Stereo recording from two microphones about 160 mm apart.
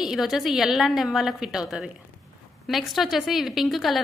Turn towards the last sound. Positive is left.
turn(degrees=0)  # may be behind; listen again after turning